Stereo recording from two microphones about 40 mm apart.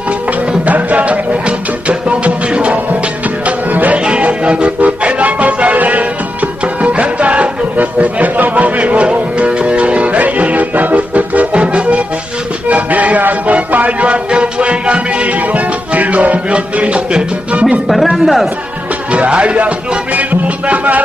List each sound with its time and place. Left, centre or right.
0.7 s music: right
17.8 s speech: centre
19.1 s music: right